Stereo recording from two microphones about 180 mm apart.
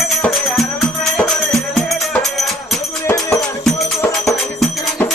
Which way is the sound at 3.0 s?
15° left (ahead or behind).